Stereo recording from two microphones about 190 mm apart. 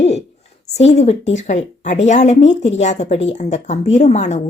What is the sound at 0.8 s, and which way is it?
A child's voice, 35° left (ahead or behind).